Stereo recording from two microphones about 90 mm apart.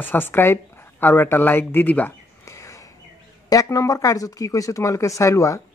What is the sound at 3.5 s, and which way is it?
Speech, 40° left (ahead or behind).